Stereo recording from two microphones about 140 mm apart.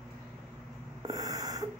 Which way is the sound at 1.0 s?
25° right (ahead or behind).